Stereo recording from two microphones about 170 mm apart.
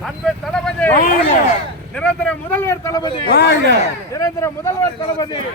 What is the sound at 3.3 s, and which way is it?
Speech, 75° left (ahead or behind).